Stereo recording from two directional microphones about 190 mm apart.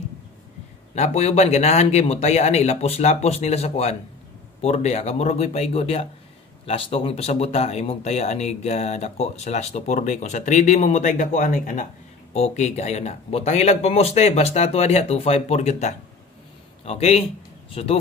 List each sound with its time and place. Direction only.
0.9 s speech: 35° left (ahead or behind)